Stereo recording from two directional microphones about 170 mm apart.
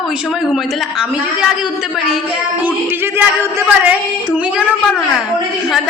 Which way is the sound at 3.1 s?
15° right (ahead or behind).